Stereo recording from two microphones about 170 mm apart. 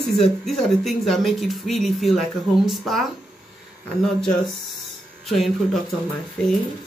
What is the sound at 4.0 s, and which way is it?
Speech, 5° left (ahead or behind).